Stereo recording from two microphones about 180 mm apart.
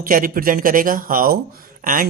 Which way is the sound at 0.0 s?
50° right (ahead or behind).